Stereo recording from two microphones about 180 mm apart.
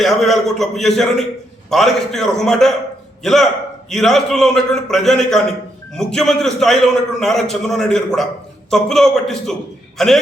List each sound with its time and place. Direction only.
0.0 s a man's voice: centre (ahead or behind)